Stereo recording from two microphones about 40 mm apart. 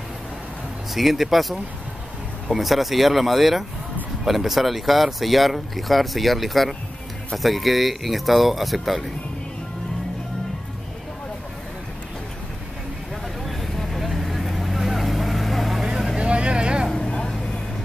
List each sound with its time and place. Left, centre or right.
0.9 s speech: centre
13.5 s vehicle: centre
15.8 s vehicle: centre
16.2 s vehicle: right
16.9 s vehicle: left